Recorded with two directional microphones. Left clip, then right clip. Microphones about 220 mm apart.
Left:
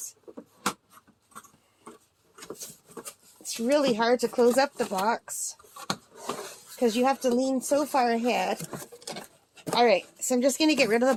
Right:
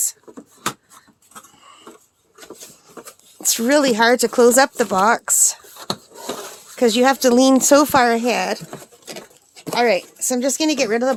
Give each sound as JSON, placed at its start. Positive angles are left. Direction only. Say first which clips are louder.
{"t": 3.4, "sound": "speech", "louder": "right 8 dB", "side_deg": -40}
{"t": 6.7, "sound": "speech", "louder": "right 9 dB", "side_deg": -40}
{"t": 9.7, "sound": "speech", "louder": "right 5 dB", "side_deg": -20}